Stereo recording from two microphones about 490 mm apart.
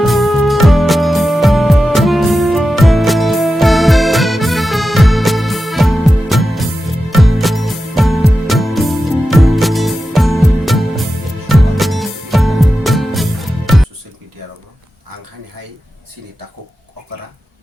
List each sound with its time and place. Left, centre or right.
0.0 s music: centre